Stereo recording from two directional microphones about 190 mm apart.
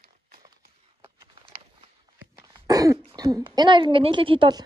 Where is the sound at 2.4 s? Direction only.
20° right (ahead or behind).